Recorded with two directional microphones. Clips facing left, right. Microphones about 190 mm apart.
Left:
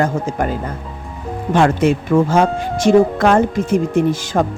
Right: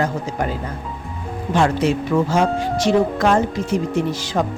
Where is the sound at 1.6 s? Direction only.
50° left (ahead or behind).